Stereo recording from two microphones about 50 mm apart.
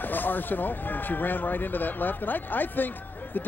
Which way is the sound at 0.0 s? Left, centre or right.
Left.